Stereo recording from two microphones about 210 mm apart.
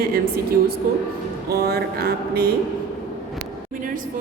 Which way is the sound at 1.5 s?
50° right (ahead or behind).